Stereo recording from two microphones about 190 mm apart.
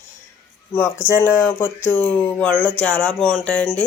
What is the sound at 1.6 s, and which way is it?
Speech, 10° left (ahead or behind).